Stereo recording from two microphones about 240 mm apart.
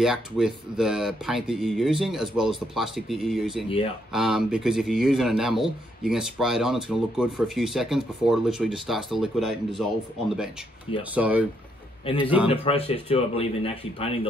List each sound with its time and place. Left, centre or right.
0.0 s a man's voice: centre
3.6 s a man's voice: left
4.1 s a man's voice: centre
11.1 s a man's voice: centre
12.4 s a man's voice: left